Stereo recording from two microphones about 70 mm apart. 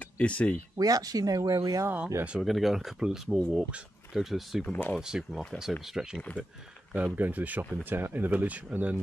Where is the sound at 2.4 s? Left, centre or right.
Centre.